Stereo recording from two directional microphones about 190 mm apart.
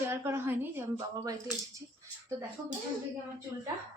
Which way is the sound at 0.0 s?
15° right (ahead or behind).